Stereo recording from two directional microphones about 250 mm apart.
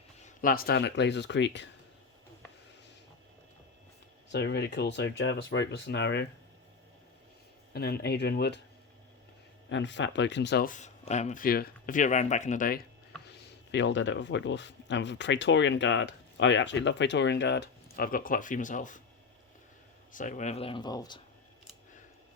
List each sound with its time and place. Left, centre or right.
0.3 s speech: left
4.3 s speech: left
7.7 s speech: left
9.6 s speech: left
20.1 s speech: left